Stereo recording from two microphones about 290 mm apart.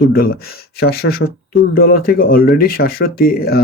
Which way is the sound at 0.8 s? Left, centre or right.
Left.